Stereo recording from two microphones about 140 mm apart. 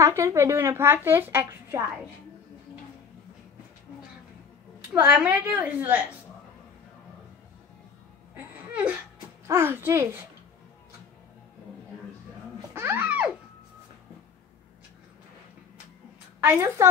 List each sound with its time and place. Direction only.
0.0 s a woman's voice: 20° right (ahead or behind)
4.9 s a woman's voice: 10° right (ahead or behind)
9.5 s a woman's voice: 15° right (ahead or behind)
12.7 s music: 15° right (ahead or behind)
16.4 s a woman's voice: 20° right (ahead or behind)